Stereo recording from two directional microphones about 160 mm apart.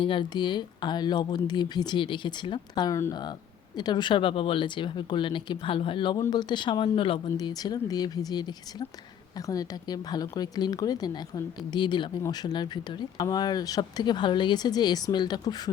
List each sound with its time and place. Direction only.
0.0 s speech: 30° left (ahead or behind)